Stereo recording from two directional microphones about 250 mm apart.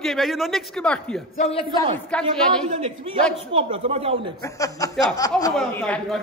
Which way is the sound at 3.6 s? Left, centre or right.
Right.